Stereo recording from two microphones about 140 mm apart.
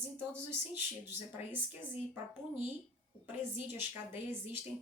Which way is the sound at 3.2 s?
15° right (ahead or behind).